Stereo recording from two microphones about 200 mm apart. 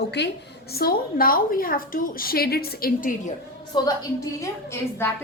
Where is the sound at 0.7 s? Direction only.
50° left (ahead or behind).